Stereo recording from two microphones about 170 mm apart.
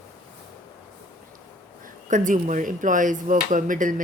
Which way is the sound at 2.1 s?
50° right (ahead or behind).